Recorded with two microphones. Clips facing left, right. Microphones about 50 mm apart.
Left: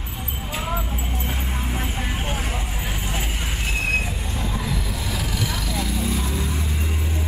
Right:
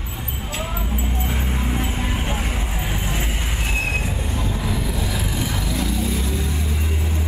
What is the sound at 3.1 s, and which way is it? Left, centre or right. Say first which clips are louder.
Train: right 2 dB; centre.